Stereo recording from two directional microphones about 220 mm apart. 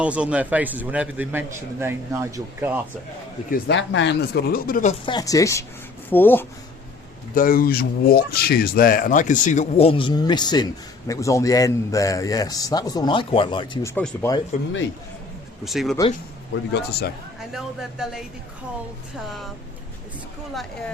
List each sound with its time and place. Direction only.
0.0 s a man's voice: 5° right (ahead or behind)
3.5 s speech: 55° left (ahead or behind); by 4.9 s 35° left (ahead or behind)
5.0 s a man's voice: 15° left (ahead or behind)
7.3 s a man's voice: 40° left (ahead or behind); by 13.9 s 20° left (ahead or behind)
13.9 s a man's voice: 10° left (ahead or behind)
15.6 s speech: centre (ahead or behind)
16.7 s speech: 45° left (ahead or behind)
17.5 s speech: centre (ahead or behind)
20.5 s speech: centre (ahead or behind)